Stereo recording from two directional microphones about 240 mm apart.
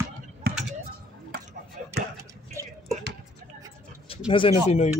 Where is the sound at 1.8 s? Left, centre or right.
Right.